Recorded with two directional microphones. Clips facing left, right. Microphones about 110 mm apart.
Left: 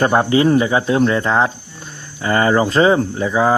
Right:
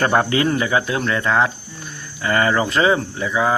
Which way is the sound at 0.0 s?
20° left (ahead or behind).